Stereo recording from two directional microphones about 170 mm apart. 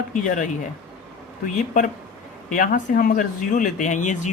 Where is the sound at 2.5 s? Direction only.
55° left (ahead or behind).